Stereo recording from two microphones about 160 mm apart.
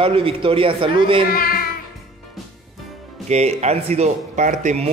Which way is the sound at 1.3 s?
65° left (ahead or behind).